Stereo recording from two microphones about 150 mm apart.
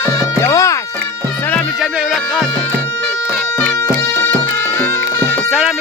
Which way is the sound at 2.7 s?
15° left (ahead or behind).